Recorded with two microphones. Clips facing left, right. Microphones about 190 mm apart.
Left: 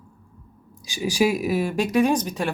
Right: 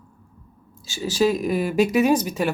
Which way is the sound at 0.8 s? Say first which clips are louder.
Right 1 dB; 15° left (ahead or behind).